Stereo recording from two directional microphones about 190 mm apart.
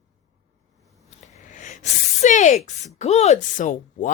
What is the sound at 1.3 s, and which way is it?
Speech, 40° left (ahead or behind).